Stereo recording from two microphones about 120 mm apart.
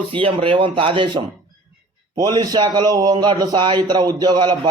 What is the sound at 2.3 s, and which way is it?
A man's voice, 35° right (ahead or behind).